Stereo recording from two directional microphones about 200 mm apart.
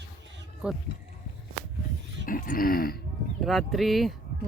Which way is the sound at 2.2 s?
45° left (ahead or behind).